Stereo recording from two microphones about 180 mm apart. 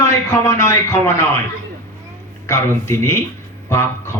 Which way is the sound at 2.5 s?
15° left (ahead or behind).